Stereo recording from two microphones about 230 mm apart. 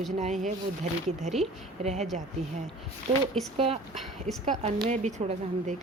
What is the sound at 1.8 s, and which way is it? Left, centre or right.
Speech, right.